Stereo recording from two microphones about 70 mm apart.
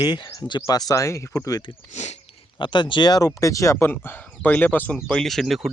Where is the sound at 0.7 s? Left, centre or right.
Left.